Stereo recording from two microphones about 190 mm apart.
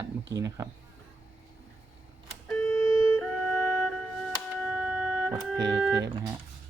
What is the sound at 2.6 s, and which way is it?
Music, 15° left (ahead or behind).